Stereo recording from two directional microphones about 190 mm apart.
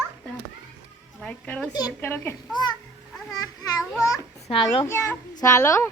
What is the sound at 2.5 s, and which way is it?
Speech, 20° left (ahead or behind).